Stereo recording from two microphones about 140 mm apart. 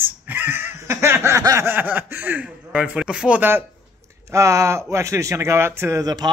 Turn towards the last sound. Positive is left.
turn(degrees=-25)  # may be behind; listen again after turning